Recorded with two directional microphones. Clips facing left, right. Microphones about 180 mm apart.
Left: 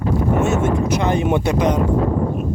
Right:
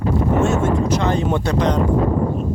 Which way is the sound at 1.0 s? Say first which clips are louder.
Left 1 dB; 15° left (ahead or behind).